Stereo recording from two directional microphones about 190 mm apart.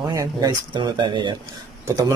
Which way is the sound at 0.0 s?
20° right (ahead or behind).